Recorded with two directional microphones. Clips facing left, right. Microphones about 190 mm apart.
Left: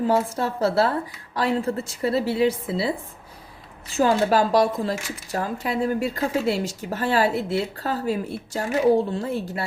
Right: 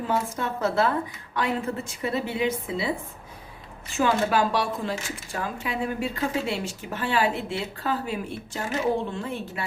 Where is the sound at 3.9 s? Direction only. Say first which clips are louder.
Left 4 dB; 35° left (ahead or behind).